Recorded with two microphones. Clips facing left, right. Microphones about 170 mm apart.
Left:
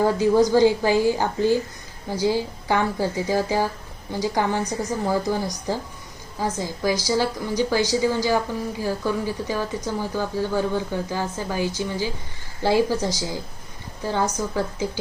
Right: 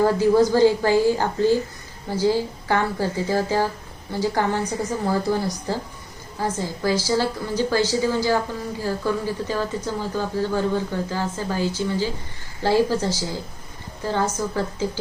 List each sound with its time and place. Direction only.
0.0 s speech: 15° left (ahead or behind)